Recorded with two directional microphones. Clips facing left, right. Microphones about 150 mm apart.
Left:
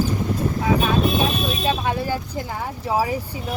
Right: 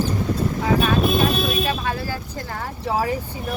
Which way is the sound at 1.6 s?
20° left (ahead or behind).